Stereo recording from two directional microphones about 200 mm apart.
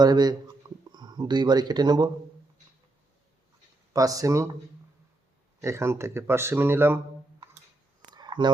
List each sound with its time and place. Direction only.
0.0 s speech: 20° right (ahead or behind)
3.9 s speech: 15° right (ahead or behind)
5.6 s speech: 15° right (ahead or behind)
8.1 s a sound: 20° right (ahead or behind)